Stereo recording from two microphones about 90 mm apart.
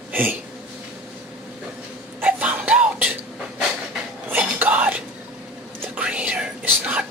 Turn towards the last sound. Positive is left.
turn(degrees=-15)  # may be behind; listen again after turning